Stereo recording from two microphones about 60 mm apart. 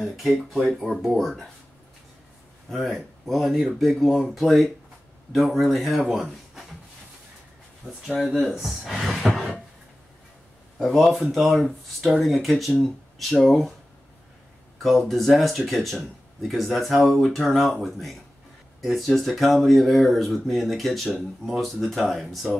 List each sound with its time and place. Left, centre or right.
0.0 s speech: centre
2.7 s speech: centre
7.8 s speech: centre
10.8 s speech: centre
14.8 s speech: centre
18.8 s speech: centre